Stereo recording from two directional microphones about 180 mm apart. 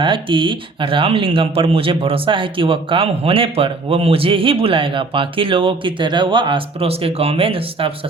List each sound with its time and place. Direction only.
0.0 s speech: 30° right (ahead or behind)